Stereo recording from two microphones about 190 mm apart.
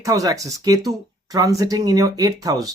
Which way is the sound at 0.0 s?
15° right (ahead or behind).